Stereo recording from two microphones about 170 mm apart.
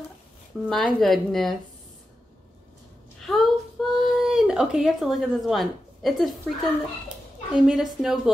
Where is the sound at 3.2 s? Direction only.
Centre (ahead or behind).